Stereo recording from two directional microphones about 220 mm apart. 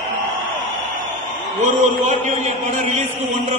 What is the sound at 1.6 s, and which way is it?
Chant, 35° right (ahead or behind).